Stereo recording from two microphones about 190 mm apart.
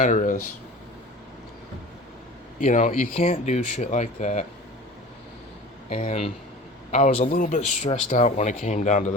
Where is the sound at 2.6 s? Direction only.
45° left (ahead or behind).